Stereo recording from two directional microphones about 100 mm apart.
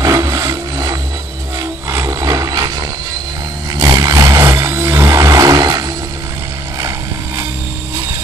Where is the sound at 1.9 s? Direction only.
30° right (ahead or behind).